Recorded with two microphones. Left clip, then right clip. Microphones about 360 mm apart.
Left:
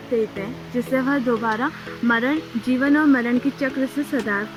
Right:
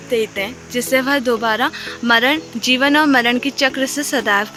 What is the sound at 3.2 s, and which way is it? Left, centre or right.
Speech, right.